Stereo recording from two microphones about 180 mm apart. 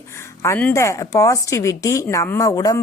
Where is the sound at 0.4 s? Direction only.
15° left (ahead or behind).